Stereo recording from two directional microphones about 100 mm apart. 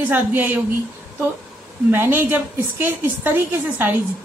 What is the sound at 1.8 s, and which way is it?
A woman's voice, 20° right (ahead or behind).